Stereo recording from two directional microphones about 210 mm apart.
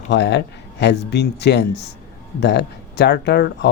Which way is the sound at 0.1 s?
55° left (ahead or behind).